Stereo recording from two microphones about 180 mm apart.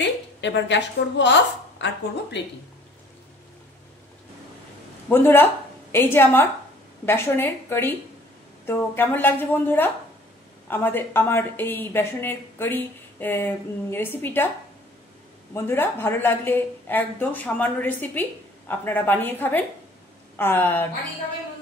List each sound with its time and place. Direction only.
0.0 s a woman's voice: 80° left
5.1 s a woman's voice: 10° left (ahead or behind)
15.5 s a woman's voice: 10° left (ahead or behind)